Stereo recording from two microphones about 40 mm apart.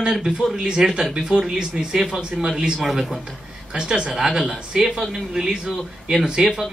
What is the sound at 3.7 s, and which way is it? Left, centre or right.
Speech, centre.